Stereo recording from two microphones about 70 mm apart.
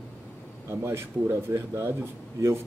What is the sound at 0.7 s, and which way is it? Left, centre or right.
Speech, right.